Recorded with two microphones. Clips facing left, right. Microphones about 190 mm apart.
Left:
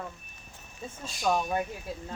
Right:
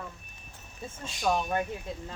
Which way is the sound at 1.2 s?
Centre (ahead or behind).